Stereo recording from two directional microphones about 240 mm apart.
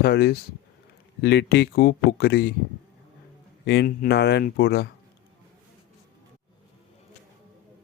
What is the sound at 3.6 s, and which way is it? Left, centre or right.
Speech, left.